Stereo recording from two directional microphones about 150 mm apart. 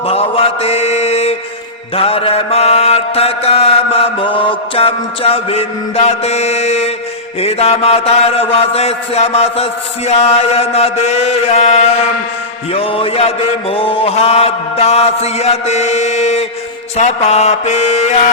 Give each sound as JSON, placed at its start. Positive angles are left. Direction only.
{"t": 0.0, "sound": "mantra", "side_deg": 40}